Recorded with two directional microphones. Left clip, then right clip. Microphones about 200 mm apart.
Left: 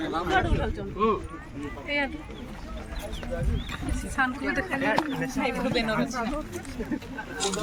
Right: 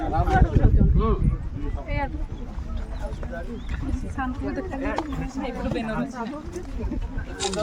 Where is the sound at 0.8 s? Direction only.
15° left (ahead or behind).